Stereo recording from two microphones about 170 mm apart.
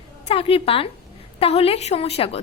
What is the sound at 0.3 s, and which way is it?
A woman's voice, 35° left (ahead or behind).